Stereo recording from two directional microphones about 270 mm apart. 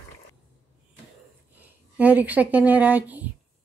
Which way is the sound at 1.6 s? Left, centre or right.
Centre.